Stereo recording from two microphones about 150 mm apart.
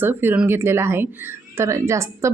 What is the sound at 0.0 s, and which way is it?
A woman's voice, 15° right (ahead or behind).